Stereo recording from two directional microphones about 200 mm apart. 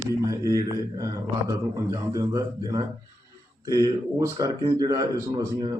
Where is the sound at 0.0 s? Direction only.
15° right (ahead or behind).